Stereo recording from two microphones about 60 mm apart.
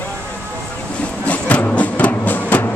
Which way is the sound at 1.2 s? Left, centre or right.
Left.